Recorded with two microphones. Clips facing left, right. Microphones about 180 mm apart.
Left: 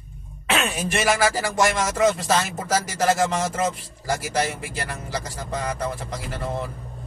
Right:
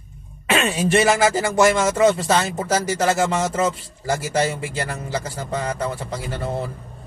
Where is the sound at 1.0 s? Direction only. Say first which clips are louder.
Right 3 dB; 25° right (ahead or behind).